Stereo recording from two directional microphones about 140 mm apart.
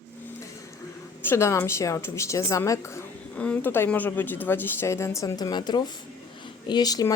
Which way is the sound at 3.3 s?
10° left (ahead or behind).